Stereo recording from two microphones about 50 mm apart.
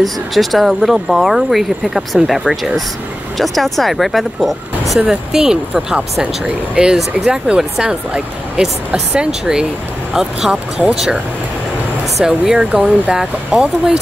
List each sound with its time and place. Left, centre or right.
0.0 s speech: centre
12.2 s speech: centre
12.7 s speech: right